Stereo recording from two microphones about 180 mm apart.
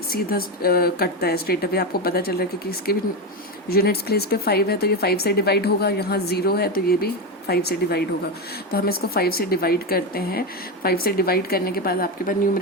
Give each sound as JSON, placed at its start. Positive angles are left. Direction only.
{"t": 0.1, "sound": "speech", "side_deg": 55}